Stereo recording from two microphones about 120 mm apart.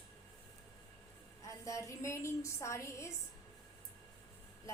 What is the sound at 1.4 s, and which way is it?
A woman's voice, 25° left (ahead or behind).